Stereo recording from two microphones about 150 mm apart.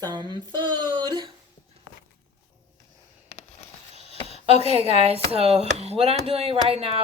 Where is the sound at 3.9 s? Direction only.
45° right (ahead or behind).